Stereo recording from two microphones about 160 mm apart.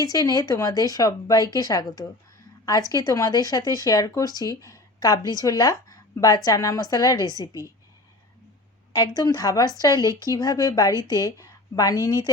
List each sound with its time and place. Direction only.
0.0 s speech: 25° left (ahead or behind)
8.9 s speech: 25° left (ahead or behind)